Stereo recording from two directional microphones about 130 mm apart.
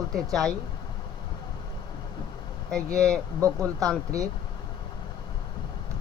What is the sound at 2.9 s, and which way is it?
Speech, 5° left (ahead or behind).